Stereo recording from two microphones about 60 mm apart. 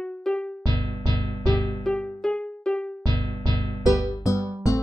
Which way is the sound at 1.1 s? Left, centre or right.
Left.